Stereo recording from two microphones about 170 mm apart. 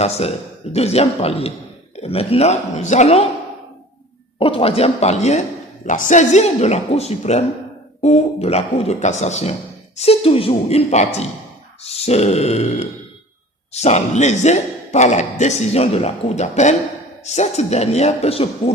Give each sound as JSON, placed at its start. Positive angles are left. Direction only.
{"t": 0.0, "sound": "speech", "side_deg": 40}
{"t": 4.4, "sound": "speech", "side_deg": 30}